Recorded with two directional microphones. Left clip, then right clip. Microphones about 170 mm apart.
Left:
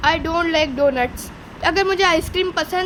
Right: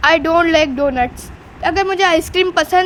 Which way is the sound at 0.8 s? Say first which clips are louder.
Right 1 dB; 10° right (ahead or behind).